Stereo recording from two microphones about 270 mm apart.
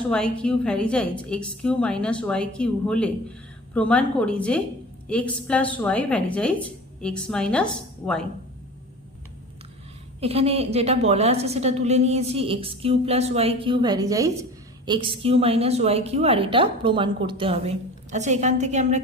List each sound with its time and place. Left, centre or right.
0.1 s a woman's voice: centre
10.2 s a woman's voice: right